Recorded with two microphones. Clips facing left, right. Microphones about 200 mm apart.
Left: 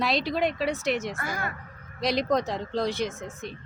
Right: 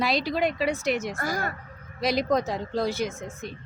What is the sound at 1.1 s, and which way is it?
Speech, 40° right (ahead or behind).